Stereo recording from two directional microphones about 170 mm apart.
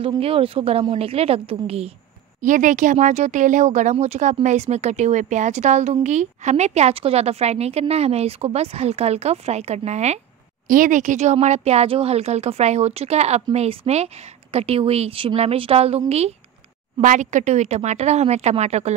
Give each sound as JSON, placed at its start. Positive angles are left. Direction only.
{"t": 0.0, "sound": "speech", "side_deg": -35}
{"t": 2.4, "sound": "speech", "side_deg": -50}
{"t": 10.7, "sound": "speech", "side_deg": -50}